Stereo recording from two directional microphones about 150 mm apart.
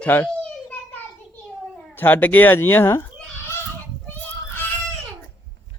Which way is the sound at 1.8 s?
10° left (ahead or behind).